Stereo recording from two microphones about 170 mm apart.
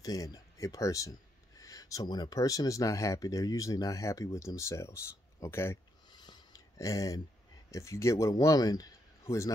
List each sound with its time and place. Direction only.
0.0 s speech: 20° left (ahead or behind)
6.0 s a sound: 25° left (ahead or behind)
7.7 s speech: 15° left (ahead or behind)